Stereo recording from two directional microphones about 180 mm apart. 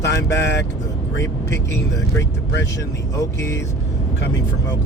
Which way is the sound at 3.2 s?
15° left (ahead or behind).